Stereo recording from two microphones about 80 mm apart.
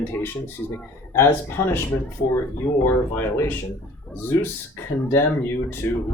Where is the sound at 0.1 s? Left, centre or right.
Left.